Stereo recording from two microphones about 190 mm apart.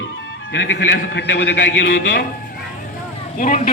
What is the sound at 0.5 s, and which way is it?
A man's voice, 80° left.